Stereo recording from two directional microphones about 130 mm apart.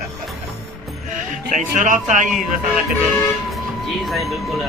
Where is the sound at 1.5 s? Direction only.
75° right (ahead or behind).